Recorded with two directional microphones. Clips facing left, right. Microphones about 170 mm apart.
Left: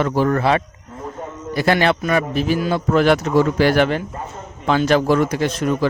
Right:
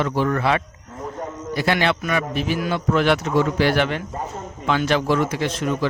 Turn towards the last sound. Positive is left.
turn(degrees=45)  # may be behind; listen again after turning